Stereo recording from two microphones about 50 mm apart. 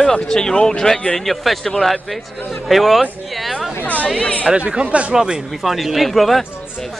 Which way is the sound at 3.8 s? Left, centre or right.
Left.